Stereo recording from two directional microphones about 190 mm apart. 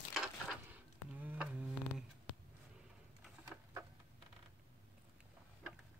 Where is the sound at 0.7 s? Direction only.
10° right (ahead or behind).